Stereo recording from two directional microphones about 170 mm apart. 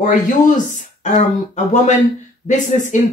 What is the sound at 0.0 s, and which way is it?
Speech, 50° left (ahead or behind).